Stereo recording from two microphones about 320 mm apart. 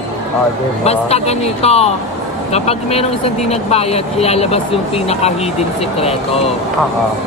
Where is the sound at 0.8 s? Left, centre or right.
Centre.